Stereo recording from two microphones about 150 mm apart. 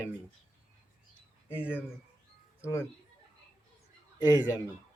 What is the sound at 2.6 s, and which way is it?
Speech, 15° left (ahead or behind).